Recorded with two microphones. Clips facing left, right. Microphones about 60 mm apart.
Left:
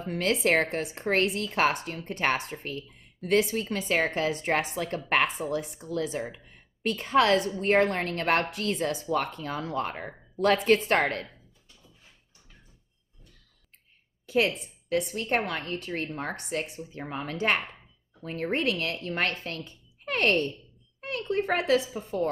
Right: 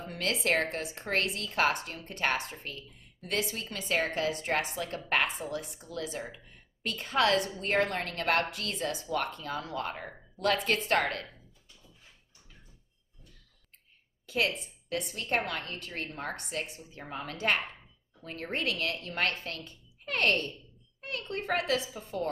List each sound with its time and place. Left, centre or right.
0.1 s a woman's voice: left
14.2 s a woman's voice: left